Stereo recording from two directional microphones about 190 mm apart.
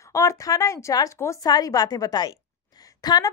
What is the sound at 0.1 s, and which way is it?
A woman's voice, 15° left (ahead or behind).